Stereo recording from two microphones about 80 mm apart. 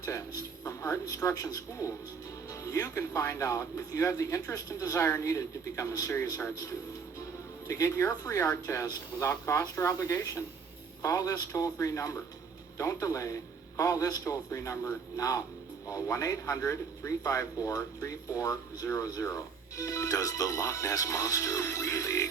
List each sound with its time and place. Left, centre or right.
0.0 s speech: left
7.7 s speech: left